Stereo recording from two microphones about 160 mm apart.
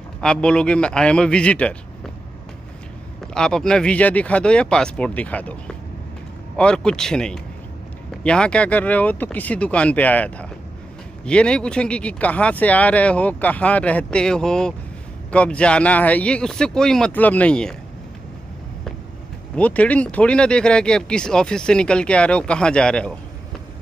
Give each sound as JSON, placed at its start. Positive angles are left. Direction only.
{"t": 0.2, "sound": "speech", "side_deg": 5}
{"t": 3.3, "sound": "speech", "side_deg": 5}
{"t": 19.5, "sound": "speech", "side_deg": 10}